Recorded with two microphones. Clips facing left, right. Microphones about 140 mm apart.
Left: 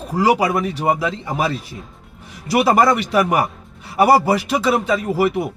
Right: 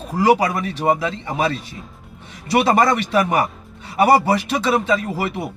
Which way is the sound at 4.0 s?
5° left (ahead or behind).